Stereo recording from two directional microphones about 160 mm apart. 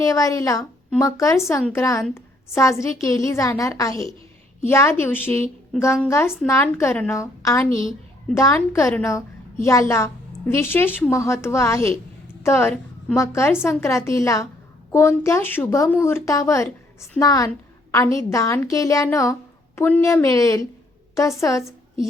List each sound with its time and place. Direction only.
0.0 s a woman's voice: 20° left (ahead or behind)